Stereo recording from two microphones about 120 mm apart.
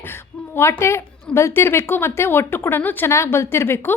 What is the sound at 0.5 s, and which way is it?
Speech, 20° left (ahead or behind).